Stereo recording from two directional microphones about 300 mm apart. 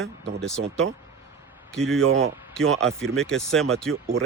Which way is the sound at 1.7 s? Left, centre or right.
Centre.